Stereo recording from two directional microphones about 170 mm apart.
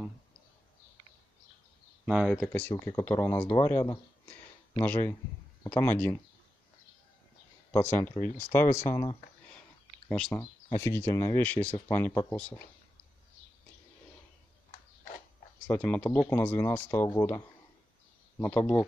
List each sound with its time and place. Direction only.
2.0 s speech: 5° right (ahead or behind)
2.7 s speech: 25° left (ahead or behind)
7.7 s speech: 15° left (ahead or behind)
10.0 s speech: 10° left (ahead or behind)
15.6 s speech: 5° left (ahead or behind)
18.4 s speech: 10° left (ahead or behind)